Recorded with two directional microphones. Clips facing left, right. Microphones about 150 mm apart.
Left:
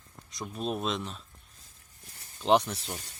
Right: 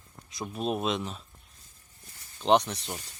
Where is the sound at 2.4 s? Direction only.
5° left (ahead or behind).